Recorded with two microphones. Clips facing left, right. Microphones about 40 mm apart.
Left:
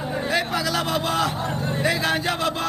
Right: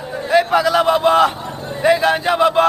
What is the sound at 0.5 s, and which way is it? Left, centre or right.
Speech, centre.